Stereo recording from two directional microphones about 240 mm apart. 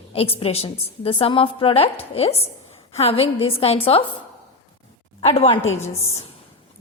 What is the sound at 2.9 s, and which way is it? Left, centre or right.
A woman's voice, left.